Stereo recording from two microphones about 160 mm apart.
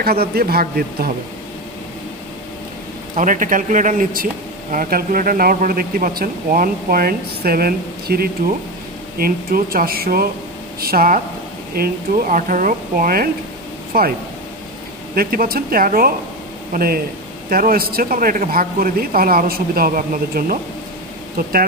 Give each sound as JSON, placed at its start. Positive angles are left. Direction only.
{"t": 0.0, "sound": "a man's voice", "side_deg": -75}
{"t": 3.2, "sound": "a man's voice", "side_deg": -55}
{"t": 15.1, "sound": "a man's voice", "side_deg": -65}